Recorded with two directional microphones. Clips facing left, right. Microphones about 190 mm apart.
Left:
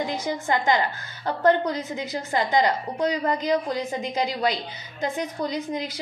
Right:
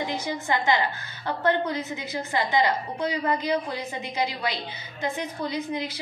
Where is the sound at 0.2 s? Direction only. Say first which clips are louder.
Left 2 dB; 45° left (ahead or behind).